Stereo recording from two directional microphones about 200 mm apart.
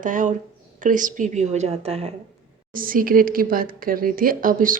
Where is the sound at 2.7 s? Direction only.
45° right (ahead or behind).